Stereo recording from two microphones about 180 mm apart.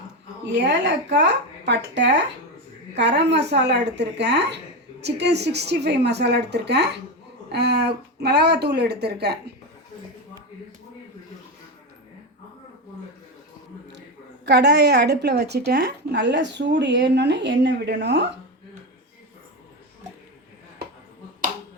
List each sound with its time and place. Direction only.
0.4 s a woman's voice: 75° right (ahead or behind)
14.4 s a woman's voice: 70° right (ahead or behind)